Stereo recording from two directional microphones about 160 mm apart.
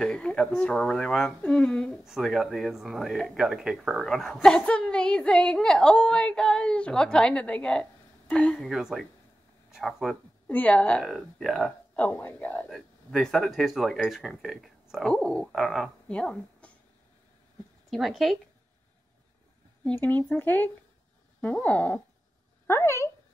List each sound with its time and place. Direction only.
0.0 s a woman's voice: 5° left (ahead or behind)
17.8 s speech: centre (ahead or behind)
19.8 s a woman's voice: 10° left (ahead or behind)